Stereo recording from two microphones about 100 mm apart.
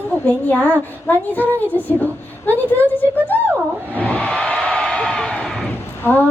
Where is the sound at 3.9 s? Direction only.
15° left (ahead or behind).